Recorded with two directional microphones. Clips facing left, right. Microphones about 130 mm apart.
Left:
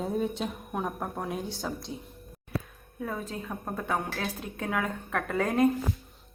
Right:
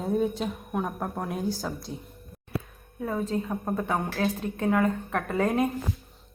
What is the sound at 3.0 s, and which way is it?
A woman's voice, 5° right (ahead or behind).